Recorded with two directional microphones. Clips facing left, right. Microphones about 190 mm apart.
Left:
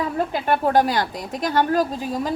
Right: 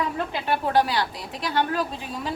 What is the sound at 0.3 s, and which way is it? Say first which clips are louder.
A woman's voice: left 3 dB; 45° left (ahead or behind).